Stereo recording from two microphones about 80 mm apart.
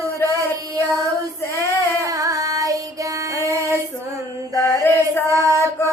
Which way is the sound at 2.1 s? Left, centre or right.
Right.